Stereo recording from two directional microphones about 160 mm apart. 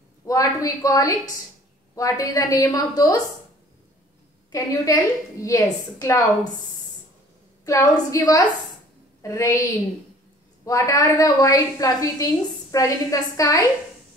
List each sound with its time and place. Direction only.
0.3 s a woman's voice: 20° left (ahead or behind)
4.5 s a woman's voice: 20° left (ahead or behind)
7.6 s a woman's voice: 20° left (ahead or behind)